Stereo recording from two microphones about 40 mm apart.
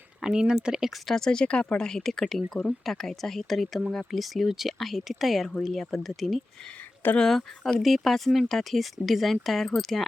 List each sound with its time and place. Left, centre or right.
0.2 s speech: centre
1.0 s speech: centre; by 1.8 s left
1.8 s speech: centre